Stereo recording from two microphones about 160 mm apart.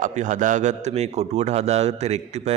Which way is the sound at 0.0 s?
50° right (ahead or behind).